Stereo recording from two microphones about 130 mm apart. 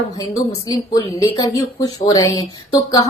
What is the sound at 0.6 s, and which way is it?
A woman's voice, 25° left (ahead or behind).